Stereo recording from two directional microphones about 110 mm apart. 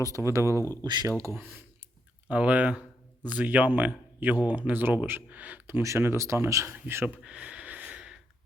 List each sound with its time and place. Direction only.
0.0 s speech: 30° right (ahead or behind)
0.9 s speech: 40° right (ahead or behind)
1.2 s speech: 20° right (ahead or behind)
7.2 s wheeze: 10° right (ahead or behind)